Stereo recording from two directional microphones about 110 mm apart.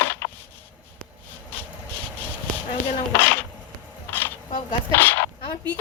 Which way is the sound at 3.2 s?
15° left (ahead or behind).